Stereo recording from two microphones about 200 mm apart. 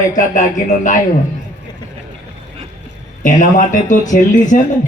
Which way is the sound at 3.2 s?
40° left (ahead or behind).